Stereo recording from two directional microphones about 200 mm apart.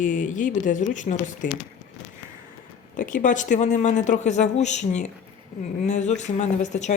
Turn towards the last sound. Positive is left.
turn(degrees=35)  # may be behind; listen again after turning